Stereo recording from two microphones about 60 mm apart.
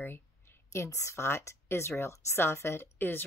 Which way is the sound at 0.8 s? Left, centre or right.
Left.